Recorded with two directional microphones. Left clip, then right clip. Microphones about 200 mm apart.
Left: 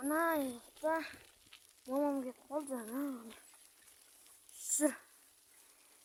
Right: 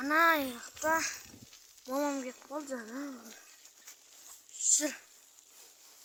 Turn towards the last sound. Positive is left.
turn(degrees=35)  # may be behind; listen again after turning